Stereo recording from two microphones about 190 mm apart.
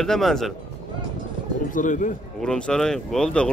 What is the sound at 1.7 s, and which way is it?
Speech, 40° left (ahead or behind).